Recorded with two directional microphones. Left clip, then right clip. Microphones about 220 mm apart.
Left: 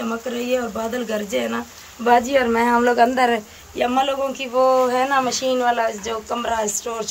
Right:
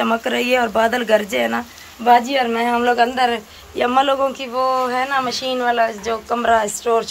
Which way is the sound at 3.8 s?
5° left (ahead or behind).